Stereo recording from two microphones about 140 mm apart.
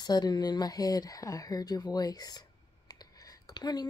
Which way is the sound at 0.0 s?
30° left (ahead or behind).